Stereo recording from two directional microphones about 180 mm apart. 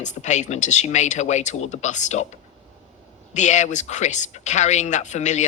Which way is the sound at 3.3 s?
40° left (ahead or behind).